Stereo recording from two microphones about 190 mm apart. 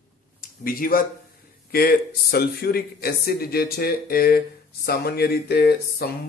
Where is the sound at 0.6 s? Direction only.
50° left (ahead or behind).